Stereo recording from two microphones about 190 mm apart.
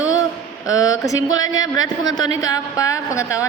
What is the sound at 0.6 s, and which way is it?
A woman's voice, 20° left (ahead or behind).